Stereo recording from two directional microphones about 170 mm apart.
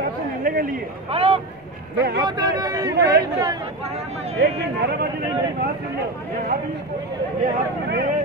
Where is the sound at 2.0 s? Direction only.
70° right (ahead or behind).